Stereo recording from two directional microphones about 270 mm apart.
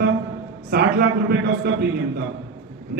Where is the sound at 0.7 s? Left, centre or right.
Right.